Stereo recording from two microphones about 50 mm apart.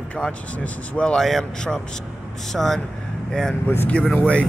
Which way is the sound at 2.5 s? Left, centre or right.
Centre.